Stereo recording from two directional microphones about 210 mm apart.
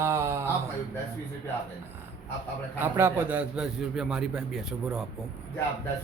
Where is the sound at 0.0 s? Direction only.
10° right (ahead or behind).